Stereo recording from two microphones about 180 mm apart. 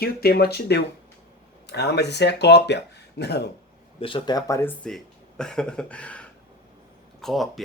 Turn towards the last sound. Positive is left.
turn(degrees=0)  # may be behind; listen again after turning